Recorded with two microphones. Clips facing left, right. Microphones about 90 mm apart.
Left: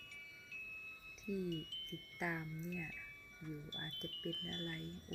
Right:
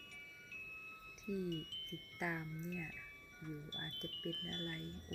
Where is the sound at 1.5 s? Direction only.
45° right (ahead or behind).